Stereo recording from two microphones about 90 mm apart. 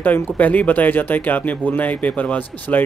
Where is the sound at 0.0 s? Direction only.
20° left (ahead or behind).